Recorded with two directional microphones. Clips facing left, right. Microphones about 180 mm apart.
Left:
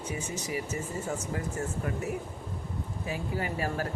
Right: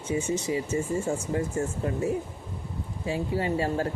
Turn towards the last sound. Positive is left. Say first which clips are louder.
# right 5 dB
turn(degrees=-25)  # may be behind; listen again after turning